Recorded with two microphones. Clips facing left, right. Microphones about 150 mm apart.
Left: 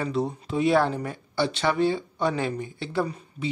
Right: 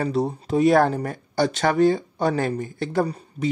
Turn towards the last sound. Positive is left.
turn(degrees=-40)  # may be behind; listen again after turning